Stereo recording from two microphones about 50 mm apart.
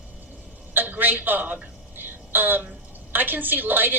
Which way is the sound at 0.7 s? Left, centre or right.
Right.